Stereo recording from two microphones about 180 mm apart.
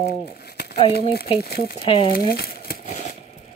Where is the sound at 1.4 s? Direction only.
60° left (ahead or behind).